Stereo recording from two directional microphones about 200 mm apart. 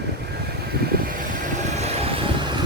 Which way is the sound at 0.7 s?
50° right (ahead or behind).